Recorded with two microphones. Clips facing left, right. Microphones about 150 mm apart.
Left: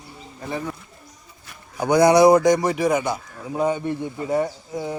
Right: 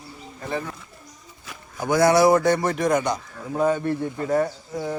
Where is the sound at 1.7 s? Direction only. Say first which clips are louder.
Left 3 dB; 20° left (ahead or behind).